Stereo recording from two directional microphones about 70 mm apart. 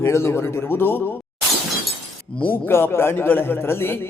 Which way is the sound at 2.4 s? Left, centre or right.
Left.